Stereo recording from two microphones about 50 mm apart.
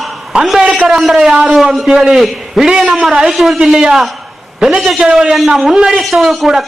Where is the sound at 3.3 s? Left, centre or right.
Centre.